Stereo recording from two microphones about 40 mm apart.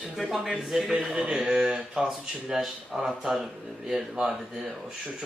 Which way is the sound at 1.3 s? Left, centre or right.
Right.